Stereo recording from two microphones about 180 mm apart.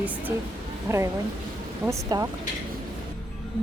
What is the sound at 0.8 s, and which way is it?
Speech, 15° right (ahead or behind).